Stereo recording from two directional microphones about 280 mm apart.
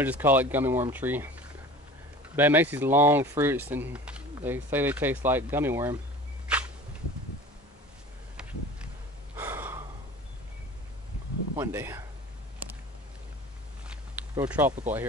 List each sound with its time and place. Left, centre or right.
0.0 s speech: centre
2.3 s speech: centre
8.4 s a sound: centre
9.4 s gasp: centre
11.5 s speech: centre
13.8 s a sound: centre